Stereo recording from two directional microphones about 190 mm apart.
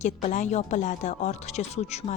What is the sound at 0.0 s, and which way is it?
Speech, 35° left (ahead or behind).